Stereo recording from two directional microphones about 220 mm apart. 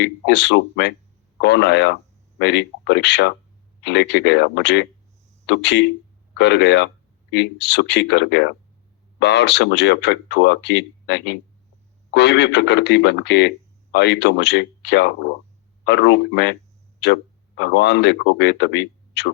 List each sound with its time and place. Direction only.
0.0 s speech: 50° left (ahead or behind)